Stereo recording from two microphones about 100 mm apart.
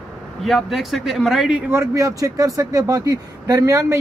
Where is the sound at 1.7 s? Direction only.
30° right (ahead or behind).